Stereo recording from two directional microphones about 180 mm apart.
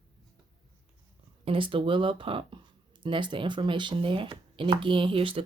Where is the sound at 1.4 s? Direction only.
30° right (ahead or behind).